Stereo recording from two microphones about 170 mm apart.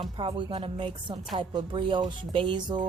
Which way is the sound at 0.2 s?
30° right (ahead or behind).